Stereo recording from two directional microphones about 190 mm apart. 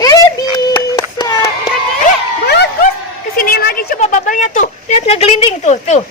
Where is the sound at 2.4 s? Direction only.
60° left (ahead or behind).